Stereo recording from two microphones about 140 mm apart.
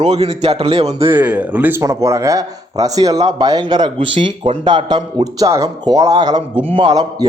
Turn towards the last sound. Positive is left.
turn(degrees=-30)  # may be behind; listen again after turning